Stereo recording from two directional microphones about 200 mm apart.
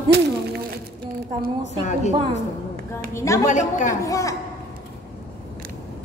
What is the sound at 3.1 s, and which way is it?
Speech, 15° left (ahead or behind).